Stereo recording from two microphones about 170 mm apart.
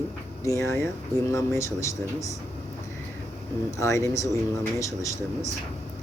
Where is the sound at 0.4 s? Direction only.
15° left (ahead or behind).